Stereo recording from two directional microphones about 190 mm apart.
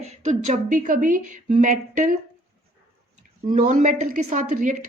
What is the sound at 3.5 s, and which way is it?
A woman's voice, 40° right (ahead or behind).